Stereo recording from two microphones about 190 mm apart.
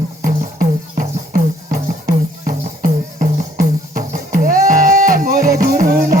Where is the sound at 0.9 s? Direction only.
50° right (ahead or behind).